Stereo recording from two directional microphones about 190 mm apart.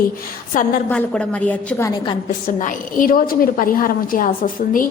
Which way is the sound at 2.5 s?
45° left (ahead or behind).